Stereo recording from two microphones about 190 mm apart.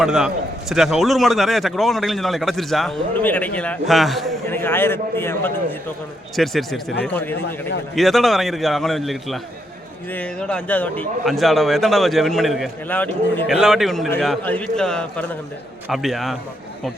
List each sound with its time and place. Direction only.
0.0 s a man's voice: 5° right (ahead or behind)
4.4 s a man's voice: 10° left (ahead or behind)
6.3 s a man's voice: centre (ahead or behind)
13.5 s a man's voice: centre (ahead or behind)